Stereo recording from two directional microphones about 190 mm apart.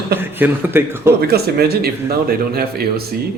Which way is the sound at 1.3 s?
55° right (ahead or behind).